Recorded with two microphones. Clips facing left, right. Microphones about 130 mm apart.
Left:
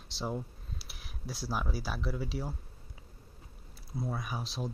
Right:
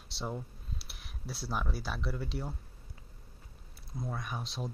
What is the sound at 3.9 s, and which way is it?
Speech, 5° left (ahead or behind).